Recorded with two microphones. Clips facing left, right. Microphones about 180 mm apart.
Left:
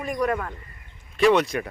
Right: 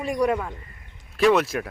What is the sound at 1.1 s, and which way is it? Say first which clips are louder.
Speech: even; 5° right (ahead or behind).